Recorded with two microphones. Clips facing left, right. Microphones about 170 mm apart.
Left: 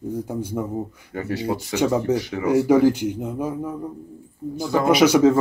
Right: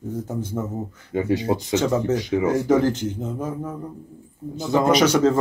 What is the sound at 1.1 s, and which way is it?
Speech, 15° right (ahead or behind).